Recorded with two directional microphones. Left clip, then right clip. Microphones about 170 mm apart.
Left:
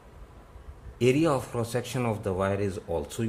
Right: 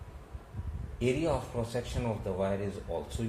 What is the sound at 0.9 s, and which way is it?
Speech, 60° left (ahead or behind).